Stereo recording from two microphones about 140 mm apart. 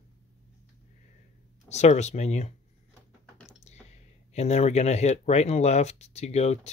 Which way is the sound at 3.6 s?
55° left (ahead or behind).